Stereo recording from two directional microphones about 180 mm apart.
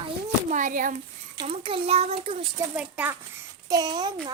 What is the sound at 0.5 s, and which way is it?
Speech, 45° right (ahead or behind).